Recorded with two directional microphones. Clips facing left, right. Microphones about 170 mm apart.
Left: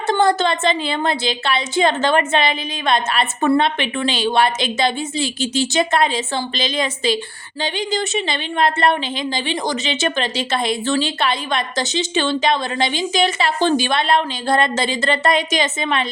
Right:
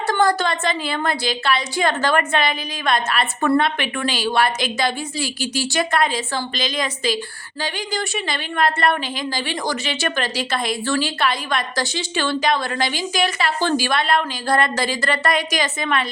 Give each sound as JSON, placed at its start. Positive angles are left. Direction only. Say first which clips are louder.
{"t": 0.1, "sound": "speech", "louder": "left 3 dB", "side_deg": 25}